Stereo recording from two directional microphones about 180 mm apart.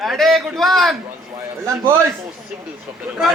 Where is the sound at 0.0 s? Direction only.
Centre (ahead or behind).